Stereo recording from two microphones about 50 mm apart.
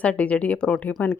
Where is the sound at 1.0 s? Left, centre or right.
Left.